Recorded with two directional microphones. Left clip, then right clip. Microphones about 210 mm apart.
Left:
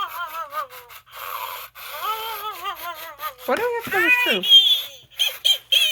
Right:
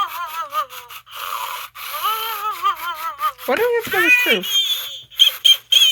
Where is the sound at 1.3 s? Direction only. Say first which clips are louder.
Right 5 dB; 25° right (ahead or behind).